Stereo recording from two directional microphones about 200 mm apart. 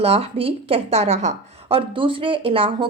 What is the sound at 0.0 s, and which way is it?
A woman's voice, 30° right (ahead or behind).